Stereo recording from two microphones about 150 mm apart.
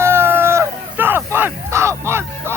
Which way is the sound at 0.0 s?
15° right (ahead or behind).